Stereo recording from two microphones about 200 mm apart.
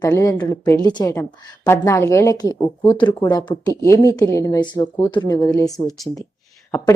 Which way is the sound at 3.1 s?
10° left (ahead or behind).